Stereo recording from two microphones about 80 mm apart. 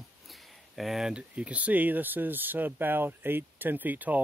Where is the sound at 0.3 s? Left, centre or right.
Centre.